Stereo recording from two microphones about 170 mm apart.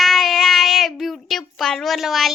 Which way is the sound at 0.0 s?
Centre (ahead or behind).